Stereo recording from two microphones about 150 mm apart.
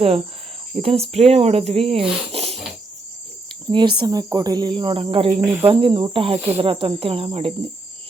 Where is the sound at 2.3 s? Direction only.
40° right (ahead or behind).